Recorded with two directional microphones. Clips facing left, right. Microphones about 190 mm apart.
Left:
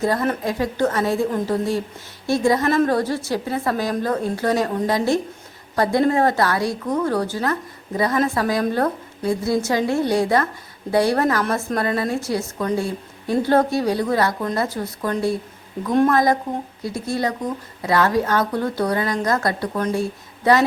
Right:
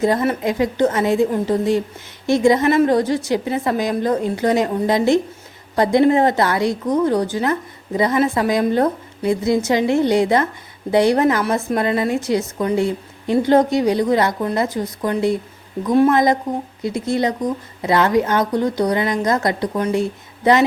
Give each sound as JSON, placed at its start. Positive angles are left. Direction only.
{"t": 0.4, "sound": "a woman's voice", "side_deg": -20}
{"t": 15.9, "sound": "a woman's voice", "side_deg": -5}
{"t": 16.1, "sound": "a woman's voice", "side_deg": -20}